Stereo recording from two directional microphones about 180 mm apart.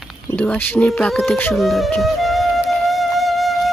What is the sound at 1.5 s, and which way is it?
Music, centre (ahead or behind).